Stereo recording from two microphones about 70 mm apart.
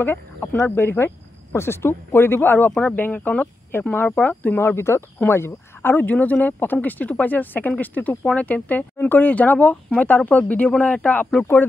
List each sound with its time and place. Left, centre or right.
0.0 s speech: left
4.6 s speech: left; by 11.2 s centre